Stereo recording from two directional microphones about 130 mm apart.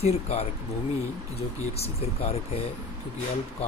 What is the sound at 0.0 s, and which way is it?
Speech, 50° left (ahead or behind).